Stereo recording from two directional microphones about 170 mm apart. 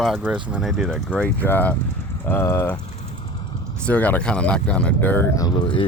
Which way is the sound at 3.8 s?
10° left (ahead or behind).